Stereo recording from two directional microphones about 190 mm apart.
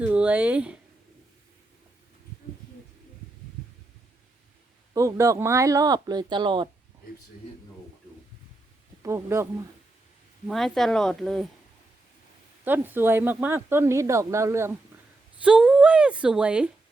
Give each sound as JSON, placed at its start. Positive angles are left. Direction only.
{"t": 0.0, "sound": "speech", "side_deg": -5}
{"t": 4.9, "sound": "speech", "side_deg": -15}
{"t": 9.0, "sound": "speech", "side_deg": -15}
{"t": 10.4, "sound": "speech", "side_deg": 0}
{"t": 12.6, "sound": "speech", "side_deg": -10}